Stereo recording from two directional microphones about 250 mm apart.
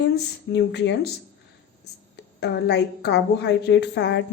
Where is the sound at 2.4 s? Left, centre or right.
Left.